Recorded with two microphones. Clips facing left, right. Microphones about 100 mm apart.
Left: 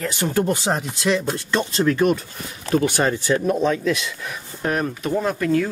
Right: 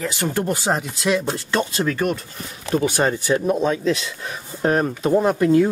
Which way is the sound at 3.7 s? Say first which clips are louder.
Right 1 dB; 30° right (ahead or behind).